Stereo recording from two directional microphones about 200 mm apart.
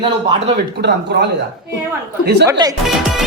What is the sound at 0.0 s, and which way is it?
Speech, 25° right (ahead or behind).